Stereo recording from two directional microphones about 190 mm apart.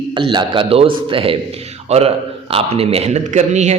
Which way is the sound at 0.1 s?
25° right (ahead or behind).